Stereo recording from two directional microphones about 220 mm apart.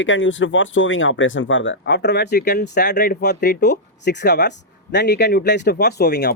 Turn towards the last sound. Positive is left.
turn(degrees=50)  # may be behind; listen again after turning